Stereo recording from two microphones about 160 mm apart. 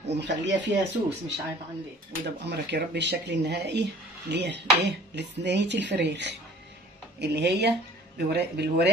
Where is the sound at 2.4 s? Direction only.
90° right.